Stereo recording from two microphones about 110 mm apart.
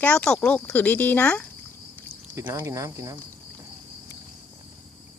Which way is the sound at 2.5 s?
30° right (ahead or behind).